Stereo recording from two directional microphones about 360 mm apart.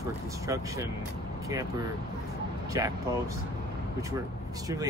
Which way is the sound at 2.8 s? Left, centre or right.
Centre.